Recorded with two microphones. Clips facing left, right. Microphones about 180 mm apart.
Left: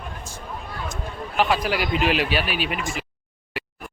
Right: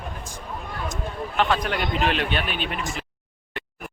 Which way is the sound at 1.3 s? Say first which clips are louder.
Left 2 dB; 5° left (ahead or behind).